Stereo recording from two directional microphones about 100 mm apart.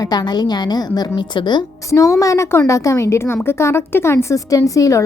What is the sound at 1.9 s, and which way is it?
A woman's voice, 30° left (ahead or behind).